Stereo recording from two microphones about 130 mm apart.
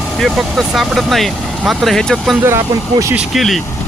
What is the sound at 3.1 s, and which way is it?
Speech, centre (ahead or behind).